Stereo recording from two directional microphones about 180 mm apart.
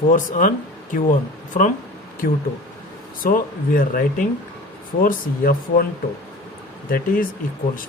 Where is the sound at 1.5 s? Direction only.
45° left (ahead or behind).